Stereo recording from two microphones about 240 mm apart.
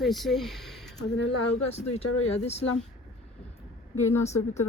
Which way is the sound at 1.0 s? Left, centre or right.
Left.